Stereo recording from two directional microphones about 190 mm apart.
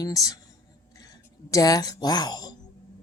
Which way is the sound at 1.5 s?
20° left (ahead or behind).